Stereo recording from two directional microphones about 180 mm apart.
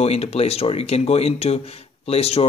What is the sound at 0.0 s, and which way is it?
Speech, 35° left (ahead or behind).